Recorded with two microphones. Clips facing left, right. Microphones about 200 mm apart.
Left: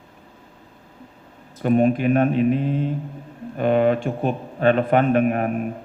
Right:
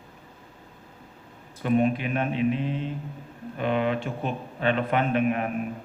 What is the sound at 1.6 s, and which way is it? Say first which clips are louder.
A man's voice: left 5 dB; 45° left (ahead or behind).